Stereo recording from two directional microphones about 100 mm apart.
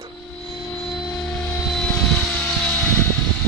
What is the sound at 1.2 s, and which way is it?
Vehicle, 5° left (ahead or behind).